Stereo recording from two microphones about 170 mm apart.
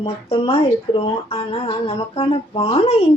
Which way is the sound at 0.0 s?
35° left (ahead or behind).